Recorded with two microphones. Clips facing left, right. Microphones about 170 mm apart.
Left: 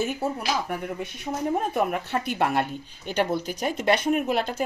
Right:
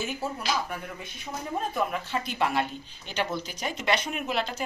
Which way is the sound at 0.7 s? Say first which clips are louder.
Left 7 dB; 65° left (ahead or behind).